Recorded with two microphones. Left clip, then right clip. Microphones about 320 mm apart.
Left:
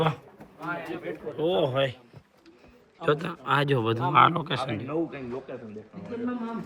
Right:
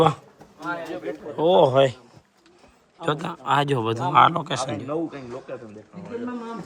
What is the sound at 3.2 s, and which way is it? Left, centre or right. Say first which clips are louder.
A man's voice: right 4 dB; centre.